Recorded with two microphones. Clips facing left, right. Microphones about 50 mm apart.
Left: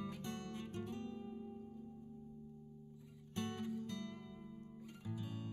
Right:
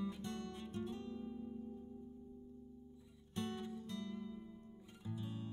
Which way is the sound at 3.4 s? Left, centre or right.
Left.